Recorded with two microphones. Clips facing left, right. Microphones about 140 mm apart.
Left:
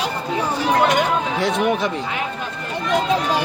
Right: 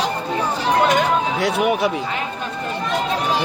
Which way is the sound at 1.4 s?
10° right (ahead or behind).